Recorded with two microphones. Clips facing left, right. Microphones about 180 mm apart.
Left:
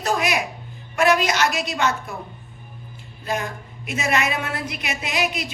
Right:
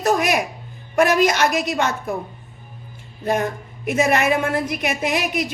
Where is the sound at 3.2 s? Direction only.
55° right (ahead or behind).